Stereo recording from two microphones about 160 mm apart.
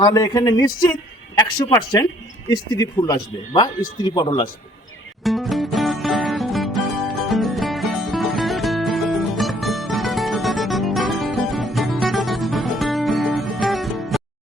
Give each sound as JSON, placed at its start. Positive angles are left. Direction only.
{"t": 0.0, "sound": "speech", "side_deg": 25}
{"t": 5.2, "sound": "music", "side_deg": 0}